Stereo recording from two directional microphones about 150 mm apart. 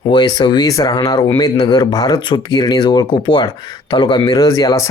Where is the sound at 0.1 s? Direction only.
30° left (ahead or behind).